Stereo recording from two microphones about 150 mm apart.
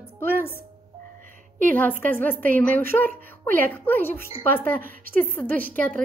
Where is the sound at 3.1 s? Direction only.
65° right (ahead or behind).